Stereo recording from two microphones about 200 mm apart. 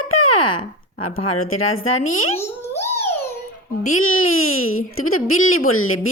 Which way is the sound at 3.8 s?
90° left.